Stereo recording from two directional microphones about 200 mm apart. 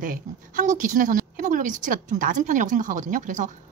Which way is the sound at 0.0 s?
40° right (ahead or behind).